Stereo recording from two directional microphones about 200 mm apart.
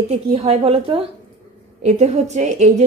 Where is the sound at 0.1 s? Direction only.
30° right (ahead or behind).